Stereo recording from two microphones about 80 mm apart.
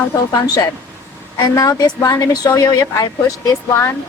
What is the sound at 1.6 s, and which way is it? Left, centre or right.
Speech, left.